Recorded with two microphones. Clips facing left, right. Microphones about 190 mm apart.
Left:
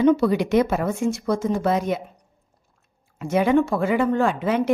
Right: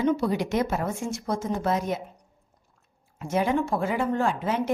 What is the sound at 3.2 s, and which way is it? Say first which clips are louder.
Speech: left 6 dB; 75° left (ahead or behind).